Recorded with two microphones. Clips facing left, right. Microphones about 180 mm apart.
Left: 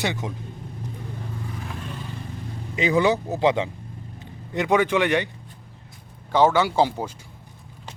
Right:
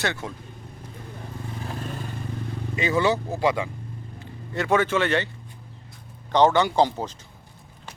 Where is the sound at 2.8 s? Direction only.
15° left (ahead or behind).